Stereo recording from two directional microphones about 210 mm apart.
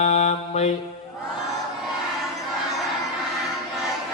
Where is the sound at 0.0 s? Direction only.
35° left (ahead or behind).